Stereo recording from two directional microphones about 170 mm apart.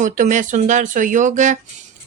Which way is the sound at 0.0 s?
50° right (ahead or behind).